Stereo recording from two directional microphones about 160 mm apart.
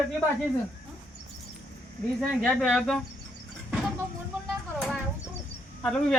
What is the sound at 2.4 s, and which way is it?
Speech, centre (ahead or behind).